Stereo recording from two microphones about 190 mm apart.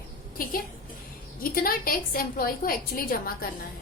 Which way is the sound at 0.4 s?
50° left (ahead or behind).